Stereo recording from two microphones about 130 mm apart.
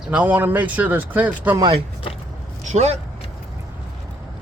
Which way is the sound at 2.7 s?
60° right (ahead or behind).